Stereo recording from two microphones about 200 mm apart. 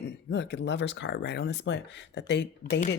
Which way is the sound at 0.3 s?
60° left (ahead or behind).